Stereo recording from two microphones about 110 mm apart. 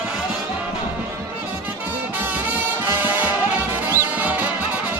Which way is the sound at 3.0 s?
15° right (ahead or behind).